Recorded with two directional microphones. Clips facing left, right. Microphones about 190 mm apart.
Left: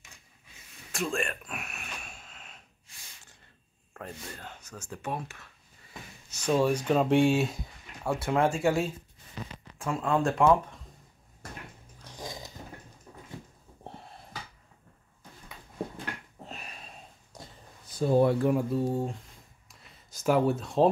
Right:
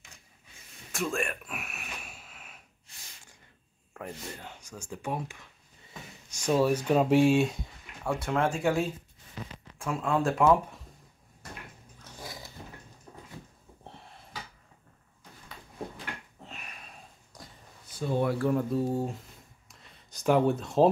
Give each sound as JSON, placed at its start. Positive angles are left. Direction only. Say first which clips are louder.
{"t": 1.1, "sound": "a sound", "louder": "even", "side_deg": 0}
{"t": 4.0, "sound": "speech", "louder": "right 2 dB", "side_deg": -15}
{"t": 12.2, "sound": "dog", "louder": "left 3 dB", "side_deg": 15}
{"t": 17.9, "sound": "speech", "louder": "left 5 dB", "side_deg": 35}
{"t": 18.4, "sound": "speech", "louder": "left 1 dB", "side_deg": 15}
{"t": 18.7, "sound": "speech", "louder": "even", "side_deg": 0}
{"t": 19.7, "sound": "a sound", "louder": "left 1 dB", "side_deg": 0}